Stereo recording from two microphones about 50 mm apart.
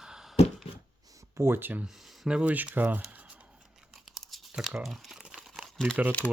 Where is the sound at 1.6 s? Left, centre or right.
Right.